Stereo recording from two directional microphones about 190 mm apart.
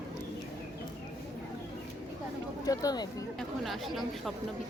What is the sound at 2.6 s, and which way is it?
Speech, 20° left (ahead or behind).